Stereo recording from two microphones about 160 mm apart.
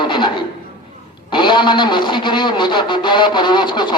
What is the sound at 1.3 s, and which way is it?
Speech, 30° left (ahead or behind).